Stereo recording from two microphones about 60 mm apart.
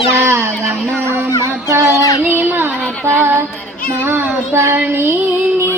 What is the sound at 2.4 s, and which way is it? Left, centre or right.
Child singing, right.